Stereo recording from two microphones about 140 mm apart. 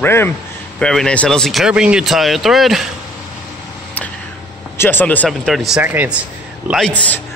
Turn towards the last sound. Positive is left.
turn(degrees=10)  # may be behind; listen again after turning